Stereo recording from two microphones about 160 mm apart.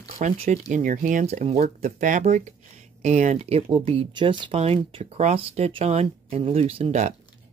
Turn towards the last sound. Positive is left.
turn(degrees=-45)  # may be behind; listen again after turning